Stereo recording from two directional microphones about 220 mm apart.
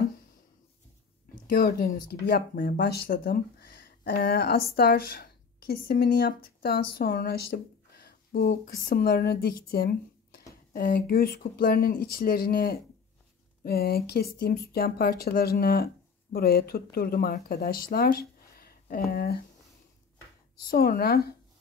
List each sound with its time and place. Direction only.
1.3 s speech: 40° left (ahead or behind)
20.6 s speech: 40° left (ahead or behind)